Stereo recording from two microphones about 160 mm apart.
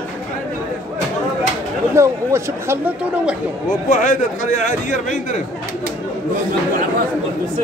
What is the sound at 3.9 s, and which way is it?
A man's voice, 55° left (ahead or behind).